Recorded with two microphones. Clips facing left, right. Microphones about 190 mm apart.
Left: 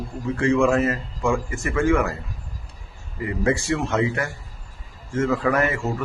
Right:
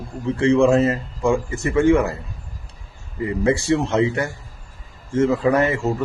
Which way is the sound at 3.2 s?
25° right (ahead or behind).